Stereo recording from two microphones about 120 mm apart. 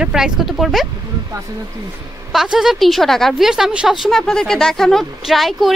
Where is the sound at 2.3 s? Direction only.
5° right (ahead or behind).